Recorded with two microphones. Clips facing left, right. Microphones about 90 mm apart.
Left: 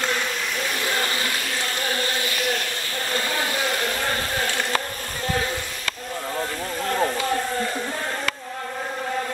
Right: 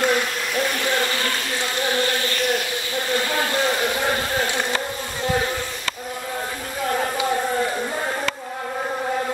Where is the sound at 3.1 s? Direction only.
15° right (ahead or behind).